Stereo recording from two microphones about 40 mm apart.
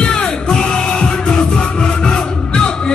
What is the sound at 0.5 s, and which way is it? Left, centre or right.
Music, centre.